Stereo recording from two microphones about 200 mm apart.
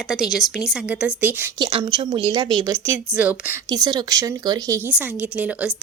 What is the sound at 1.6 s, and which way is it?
Speech, 25° right (ahead or behind).